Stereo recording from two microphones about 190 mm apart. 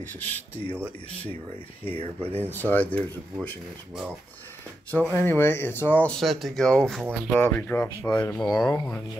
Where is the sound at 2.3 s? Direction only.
10° left (ahead or behind).